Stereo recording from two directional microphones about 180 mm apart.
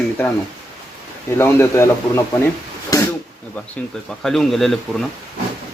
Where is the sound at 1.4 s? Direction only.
15° left (ahead or behind).